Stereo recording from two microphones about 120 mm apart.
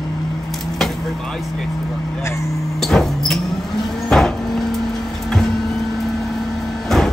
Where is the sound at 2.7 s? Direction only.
5° left (ahead or behind).